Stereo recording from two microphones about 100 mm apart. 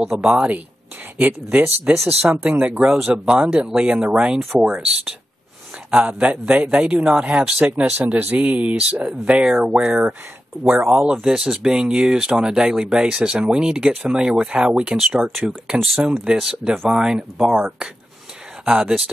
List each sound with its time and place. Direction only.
0.0 s speech: 5° right (ahead or behind)
1.1 s speech: 20° right (ahead or behind)
18.7 s speech: 10° right (ahead or behind)